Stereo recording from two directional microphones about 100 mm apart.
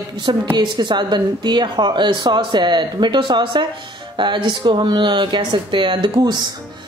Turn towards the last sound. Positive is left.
turn(degrees=-55)  # may be behind; listen again after turning